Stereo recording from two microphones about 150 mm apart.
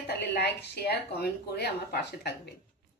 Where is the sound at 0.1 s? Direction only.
90° left.